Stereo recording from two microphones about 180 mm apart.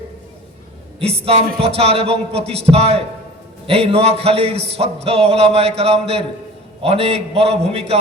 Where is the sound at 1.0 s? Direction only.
35° right (ahead or behind).